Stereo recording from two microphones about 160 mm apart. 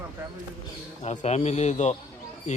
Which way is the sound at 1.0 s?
45° left (ahead or behind).